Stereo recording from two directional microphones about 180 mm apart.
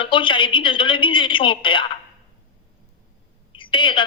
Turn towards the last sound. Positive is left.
turn(degrees=30)  # may be behind; listen again after turning